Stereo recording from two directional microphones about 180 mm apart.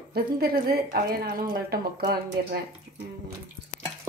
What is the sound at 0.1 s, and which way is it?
A woman's voice, 55° right (ahead or behind).